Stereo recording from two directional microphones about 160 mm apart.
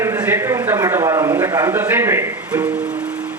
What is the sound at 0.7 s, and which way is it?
Speech, 20° right (ahead or behind).